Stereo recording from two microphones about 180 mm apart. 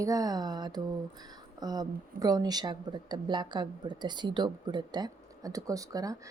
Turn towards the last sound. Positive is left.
turn(degrees=-20)  # may be behind; listen again after turning